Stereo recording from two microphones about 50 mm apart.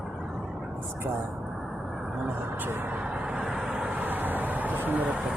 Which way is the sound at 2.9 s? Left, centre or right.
Right.